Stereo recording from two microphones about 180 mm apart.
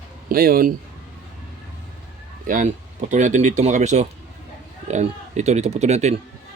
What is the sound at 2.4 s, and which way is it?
Speech, 50° right (ahead or behind).